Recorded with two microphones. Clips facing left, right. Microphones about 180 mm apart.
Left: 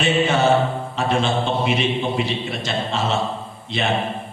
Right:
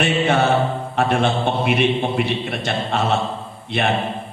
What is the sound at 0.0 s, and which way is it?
Mantra, 60° right (ahead or behind).